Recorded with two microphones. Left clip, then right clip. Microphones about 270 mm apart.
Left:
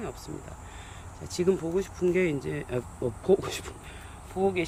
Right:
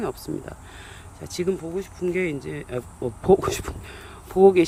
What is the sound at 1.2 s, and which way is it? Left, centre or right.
Speech, centre.